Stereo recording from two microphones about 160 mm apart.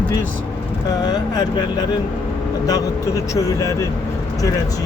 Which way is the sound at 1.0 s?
25° left (ahead or behind).